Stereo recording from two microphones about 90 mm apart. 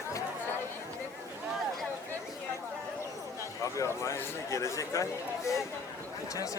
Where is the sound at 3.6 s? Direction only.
35° left (ahead or behind).